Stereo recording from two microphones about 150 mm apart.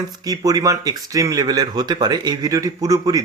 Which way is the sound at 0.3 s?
25° right (ahead or behind).